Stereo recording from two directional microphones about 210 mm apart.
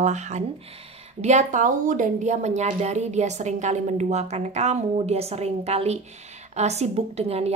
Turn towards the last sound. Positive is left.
turn(degrees=-30)  # may be behind; listen again after turning